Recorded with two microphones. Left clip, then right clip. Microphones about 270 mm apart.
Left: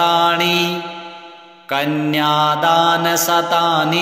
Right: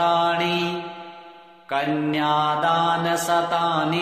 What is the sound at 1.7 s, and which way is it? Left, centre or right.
Mantra, left.